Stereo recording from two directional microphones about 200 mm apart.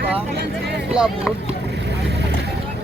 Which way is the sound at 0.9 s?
5° right (ahead or behind).